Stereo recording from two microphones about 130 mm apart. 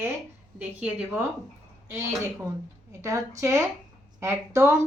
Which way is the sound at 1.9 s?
25° right (ahead or behind).